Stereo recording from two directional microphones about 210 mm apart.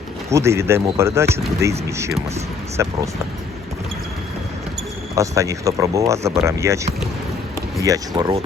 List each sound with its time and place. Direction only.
0.3 s speech: 15° right (ahead or behind)
2.8 s speech: 15° right (ahead or behind)
5.1 s speech: 15° right (ahead or behind)